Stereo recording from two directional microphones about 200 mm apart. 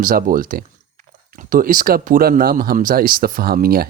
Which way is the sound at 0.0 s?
45° right (ahead or behind).